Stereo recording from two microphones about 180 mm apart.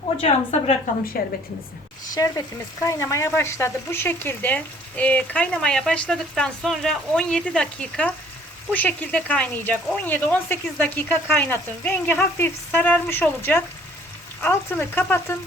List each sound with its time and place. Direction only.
0.2 s a woman's voice: 35° left (ahead or behind)
1.2 s a woman's voice: 55° left (ahead or behind)
2.1 s speech: 20° left (ahead or behind)